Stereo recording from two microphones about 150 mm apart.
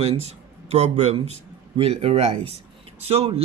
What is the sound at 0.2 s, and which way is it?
A man's voice, 45° right (ahead or behind).